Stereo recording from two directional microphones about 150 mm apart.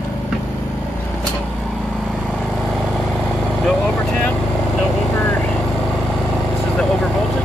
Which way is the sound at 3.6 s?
10° left (ahead or behind).